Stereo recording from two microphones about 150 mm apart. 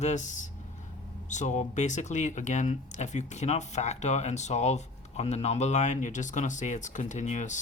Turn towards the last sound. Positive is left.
turn(degrees=55)  # may be behind; listen again after turning